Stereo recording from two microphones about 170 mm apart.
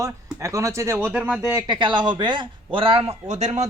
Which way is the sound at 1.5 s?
25° right (ahead or behind).